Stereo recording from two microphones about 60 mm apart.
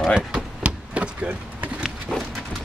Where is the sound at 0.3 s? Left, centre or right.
Centre.